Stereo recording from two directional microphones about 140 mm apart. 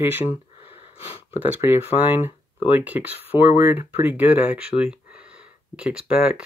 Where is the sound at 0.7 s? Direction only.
40° left (ahead or behind).